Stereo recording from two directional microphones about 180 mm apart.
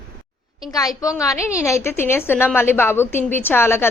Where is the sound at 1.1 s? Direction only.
15° left (ahead or behind).